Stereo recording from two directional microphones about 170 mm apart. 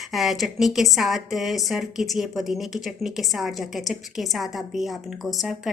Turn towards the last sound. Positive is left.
turn(degrees=0)  # may be behind; listen again after turning